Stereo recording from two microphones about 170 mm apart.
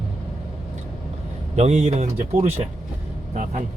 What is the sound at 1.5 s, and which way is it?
Speech, 40° right (ahead or behind).